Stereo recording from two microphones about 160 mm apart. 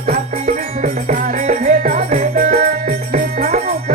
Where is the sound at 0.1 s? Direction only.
50° right (ahead or behind).